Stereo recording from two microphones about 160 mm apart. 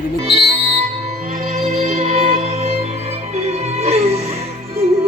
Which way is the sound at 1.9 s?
45° right (ahead or behind).